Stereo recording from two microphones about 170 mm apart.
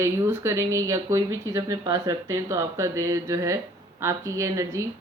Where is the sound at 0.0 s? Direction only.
15° right (ahead or behind).